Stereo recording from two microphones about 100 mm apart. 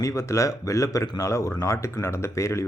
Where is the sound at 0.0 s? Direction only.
30° left (ahead or behind).